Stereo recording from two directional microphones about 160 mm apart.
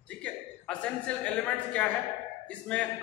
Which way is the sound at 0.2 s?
5° left (ahead or behind).